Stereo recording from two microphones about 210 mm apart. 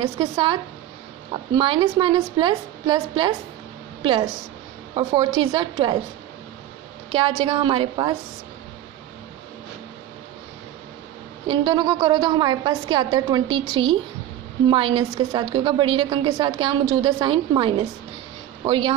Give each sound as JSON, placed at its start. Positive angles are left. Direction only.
{"t": 0.2, "sound": "a woman's voice", "side_deg": -25}
{"t": 7.1, "sound": "a woman's voice", "side_deg": -25}
{"t": 11.4, "sound": "a woman's voice", "side_deg": -20}